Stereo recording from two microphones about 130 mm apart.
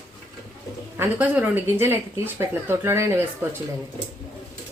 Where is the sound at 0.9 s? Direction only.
10° right (ahead or behind).